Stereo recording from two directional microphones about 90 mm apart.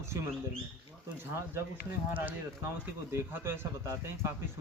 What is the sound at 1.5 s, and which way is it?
Speech, 20° right (ahead or behind).